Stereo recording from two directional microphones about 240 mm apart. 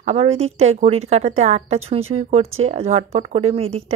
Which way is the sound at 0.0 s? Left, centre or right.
Right.